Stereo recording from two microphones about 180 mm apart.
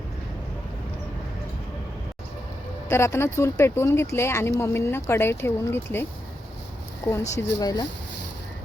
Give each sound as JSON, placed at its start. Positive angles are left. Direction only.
{"t": 2.9, "sound": "speech", "side_deg": 15}